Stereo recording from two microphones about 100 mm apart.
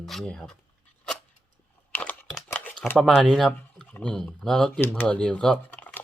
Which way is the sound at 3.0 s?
Centre (ahead or behind).